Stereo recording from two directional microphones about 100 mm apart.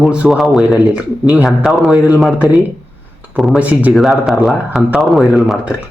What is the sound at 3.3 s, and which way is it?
Speech, centre (ahead or behind).